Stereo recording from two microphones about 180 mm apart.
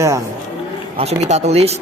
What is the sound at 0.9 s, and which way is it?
Speech, 40° right (ahead or behind).